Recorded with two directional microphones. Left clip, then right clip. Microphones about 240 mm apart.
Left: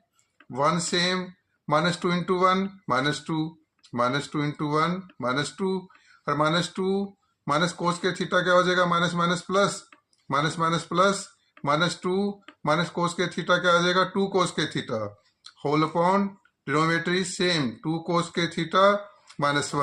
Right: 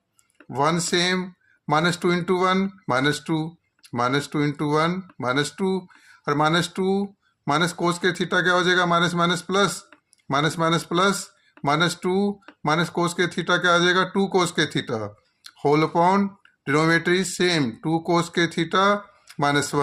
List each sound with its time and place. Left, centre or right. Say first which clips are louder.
0.5 s speech: right 2 dB; right